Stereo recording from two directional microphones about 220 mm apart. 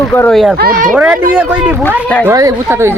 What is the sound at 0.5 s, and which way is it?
Speech, 40° right (ahead or behind).